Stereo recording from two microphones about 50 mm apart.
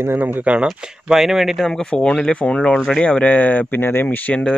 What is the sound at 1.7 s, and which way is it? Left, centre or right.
Speech, centre.